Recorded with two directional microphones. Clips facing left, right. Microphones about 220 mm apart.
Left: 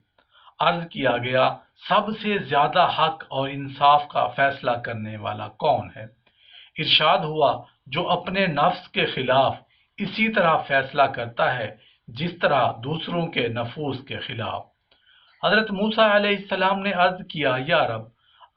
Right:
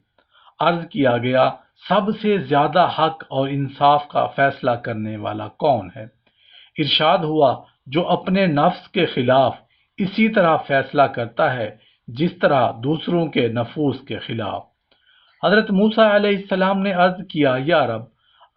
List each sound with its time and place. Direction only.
0.5 s speech: 45° right (ahead or behind)